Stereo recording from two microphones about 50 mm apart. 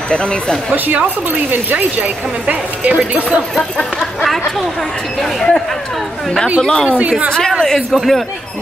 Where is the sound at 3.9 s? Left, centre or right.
Centre.